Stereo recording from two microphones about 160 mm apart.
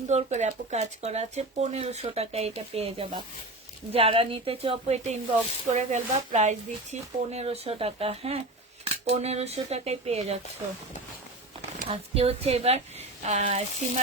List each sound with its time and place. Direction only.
0.1 s speech: 45° right (ahead or behind)
11.9 s speech: 40° right (ahead or behind)